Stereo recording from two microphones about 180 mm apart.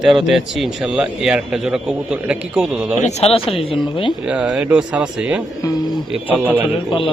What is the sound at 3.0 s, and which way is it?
Speech, 35° left (ahead or behind).